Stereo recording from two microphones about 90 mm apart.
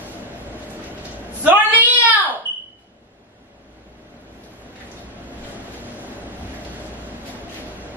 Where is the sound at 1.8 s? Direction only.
20° right (ahead or behind).